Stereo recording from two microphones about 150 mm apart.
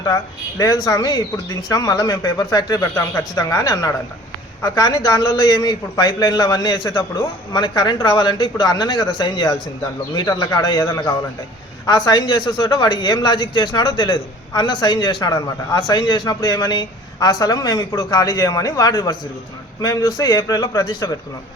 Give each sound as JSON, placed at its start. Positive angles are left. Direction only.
{"t": 0.6, "sound": "a man's voice", "side_deg": 25}